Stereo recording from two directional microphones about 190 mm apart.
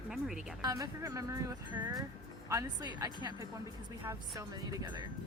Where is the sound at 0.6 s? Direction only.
15° right (ahead or behind).